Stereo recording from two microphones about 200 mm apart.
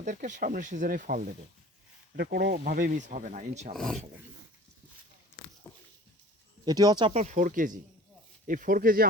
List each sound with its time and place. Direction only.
0.0 s speech: 40° right (ahead or behind)
2.1 s speech: 55° right (ahead or behind); by 3.8 s 35° right (ahead or behind)
3.8 s speech: centre (ahead or behind)
5.7 s dog: 15° left (ahead or behind)
6.7 s speech: 20° right (ahead or behind); by 9.0 s 45° right (ahead or behind)